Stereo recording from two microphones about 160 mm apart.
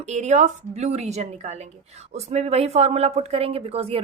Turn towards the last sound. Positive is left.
turn(degrees=-40)  # may be behind; listen again after turning